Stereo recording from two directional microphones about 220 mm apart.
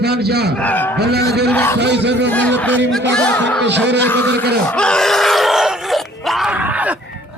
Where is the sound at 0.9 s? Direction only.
50° right (ahead or behind).